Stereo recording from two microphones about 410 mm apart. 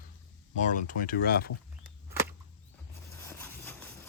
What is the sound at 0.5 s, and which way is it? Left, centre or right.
Speech, centre.